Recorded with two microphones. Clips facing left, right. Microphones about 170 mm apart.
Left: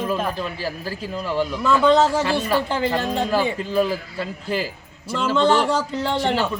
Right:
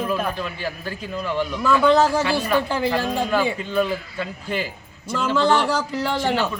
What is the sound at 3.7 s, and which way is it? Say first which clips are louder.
Speech: left 2 dB; 35° left (ahead or behind).